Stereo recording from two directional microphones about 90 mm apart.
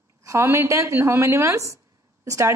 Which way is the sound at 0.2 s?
35° right (ahead or behind).